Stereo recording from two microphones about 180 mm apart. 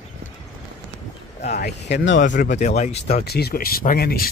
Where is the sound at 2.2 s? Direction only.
45° left (ahead or behind).